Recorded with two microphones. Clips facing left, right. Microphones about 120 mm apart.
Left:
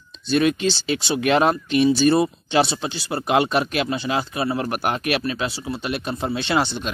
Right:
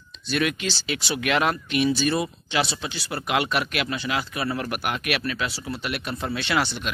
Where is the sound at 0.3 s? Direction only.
30° left (ahead or behind).